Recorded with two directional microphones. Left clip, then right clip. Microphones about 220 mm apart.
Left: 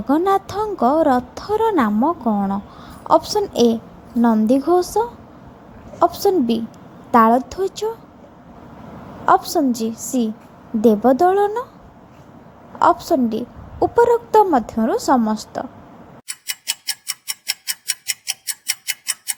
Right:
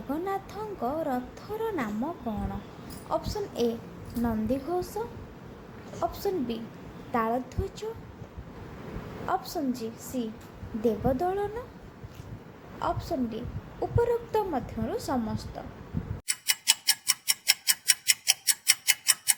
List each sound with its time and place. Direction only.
0.1 s a woman's voice: 40° left (ahead or behind)
9.2 s a woman's voice: 40° left (ahead or behind)
12.8 s a woman's voice: 40° left (ahead or behind)
16.2 s tick-tock: centre (ahead or behind)